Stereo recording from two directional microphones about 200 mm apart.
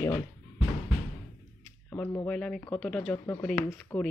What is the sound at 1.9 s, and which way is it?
Speech, 10° left (ahead or behind).